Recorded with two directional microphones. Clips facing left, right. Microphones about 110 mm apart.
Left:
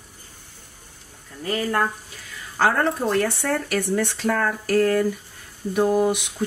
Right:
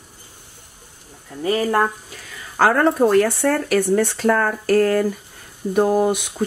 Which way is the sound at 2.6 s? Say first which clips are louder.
Right 5 dB; 45° right (ahead or behind).